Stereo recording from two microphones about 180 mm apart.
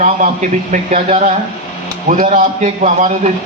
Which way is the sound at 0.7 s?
35° right (ahead or behind).